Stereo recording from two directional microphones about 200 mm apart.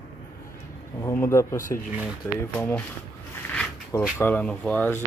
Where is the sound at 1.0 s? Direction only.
10° left (ahead or behind).